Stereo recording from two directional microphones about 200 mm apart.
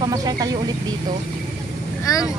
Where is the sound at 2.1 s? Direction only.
15° left (ahead or behind).